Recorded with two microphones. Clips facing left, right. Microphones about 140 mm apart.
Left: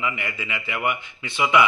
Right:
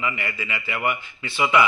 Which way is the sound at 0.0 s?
15° left (ahead or behind).